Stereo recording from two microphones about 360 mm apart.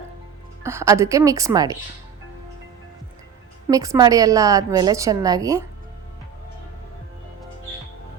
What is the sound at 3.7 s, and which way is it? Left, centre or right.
Speech, centre.